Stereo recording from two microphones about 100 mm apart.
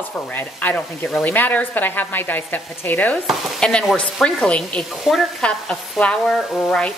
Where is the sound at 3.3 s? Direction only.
10° left (ahead or behind).